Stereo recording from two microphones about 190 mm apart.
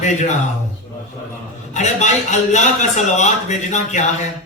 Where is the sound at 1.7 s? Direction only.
40° left (ahead or behind).